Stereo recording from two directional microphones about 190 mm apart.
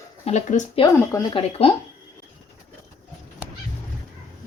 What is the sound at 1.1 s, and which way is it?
Speech, 25° left (ahead or behind).